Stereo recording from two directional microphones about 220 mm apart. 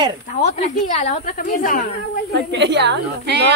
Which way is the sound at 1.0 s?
35° left (ahead or behind).